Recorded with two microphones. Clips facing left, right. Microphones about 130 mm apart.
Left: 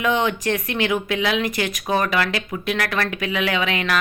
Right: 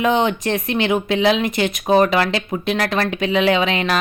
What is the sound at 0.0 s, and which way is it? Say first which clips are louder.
A woman's voice: right 3 dB; 25° right (ahead or behind).